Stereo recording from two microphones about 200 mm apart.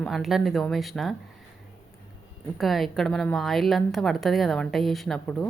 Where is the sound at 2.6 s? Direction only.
Centre (ahead or behind).